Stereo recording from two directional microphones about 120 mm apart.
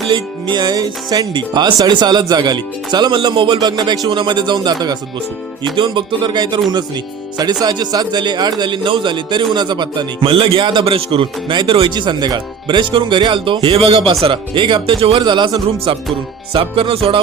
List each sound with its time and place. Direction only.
0.1 s a man's voice: 40° right (ahead or behind)
14.3 s speech: 40° right (ahead or behind)
15.2 s a man's voice: 40° right (ahead or behind)
15.5 s speech: 55° right (ahead or behind)